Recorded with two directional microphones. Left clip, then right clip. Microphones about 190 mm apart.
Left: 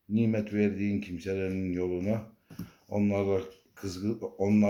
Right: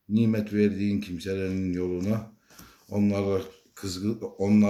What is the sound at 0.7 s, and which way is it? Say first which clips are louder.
Speech: right 3 dB; 5° right (ahead or behind).